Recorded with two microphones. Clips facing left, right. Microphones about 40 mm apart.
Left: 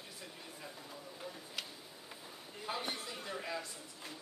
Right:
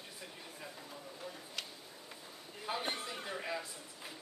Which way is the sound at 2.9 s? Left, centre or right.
Centre.